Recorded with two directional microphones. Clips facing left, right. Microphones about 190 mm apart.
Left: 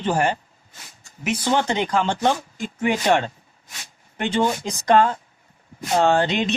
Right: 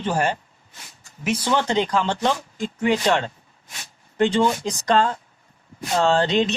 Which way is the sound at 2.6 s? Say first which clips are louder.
Even; 50° left (ahead or behind).